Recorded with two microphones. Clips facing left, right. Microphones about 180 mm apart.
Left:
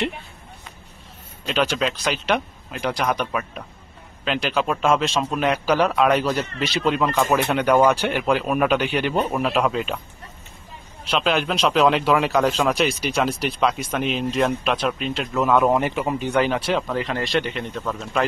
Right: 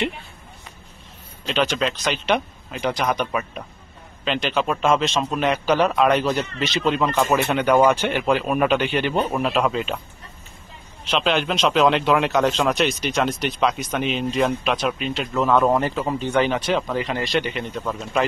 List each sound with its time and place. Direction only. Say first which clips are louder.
1.5 s a man's voice: even; centre (ahead or behind)
11.1 s a man's voice: even; 5° left (ahead or behind)
16.4 s a man's voice: even; centre (ahead or behind)